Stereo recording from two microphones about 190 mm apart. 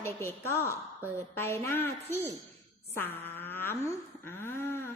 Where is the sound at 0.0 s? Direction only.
10° left (ahead or behind).